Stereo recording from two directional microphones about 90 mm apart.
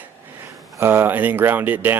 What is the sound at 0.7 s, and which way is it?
A man's voice, 30° right (ahead or behind).